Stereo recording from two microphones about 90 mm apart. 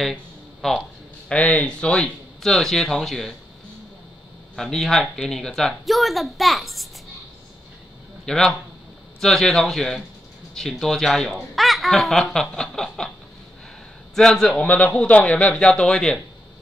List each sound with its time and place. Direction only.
0.1 s a sound: 5° left (ahead or behind)
1.3 s a man's voice: 15° left (ahead or behind)
4.6 s speech: 5° left (ahead or behind)
8.3 s a man's voice: 5° left (ahead or behind)
14.1 s a man's voice: 5° left (ahead or behind)